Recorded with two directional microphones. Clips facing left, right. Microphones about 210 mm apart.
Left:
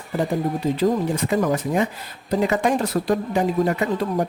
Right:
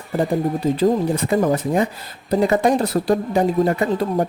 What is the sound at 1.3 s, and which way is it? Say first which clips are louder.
Speech: right 3 dB; 30° right (ahead or behind).